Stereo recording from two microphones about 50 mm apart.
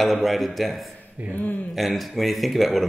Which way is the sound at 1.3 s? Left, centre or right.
Left.